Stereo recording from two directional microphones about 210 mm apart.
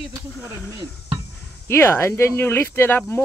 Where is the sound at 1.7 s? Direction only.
10° left (ahead or behind).